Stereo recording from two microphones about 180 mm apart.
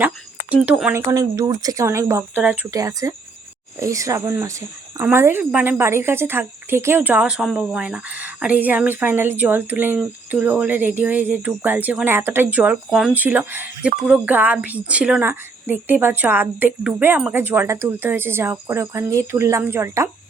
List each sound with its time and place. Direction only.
0.5 s a woman's voice: 5° right (ahead or behind)
1.1 s a woman's voice: 20° right (ahead or behind)